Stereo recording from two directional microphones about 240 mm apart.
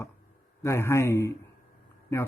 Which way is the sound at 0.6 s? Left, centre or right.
Centre.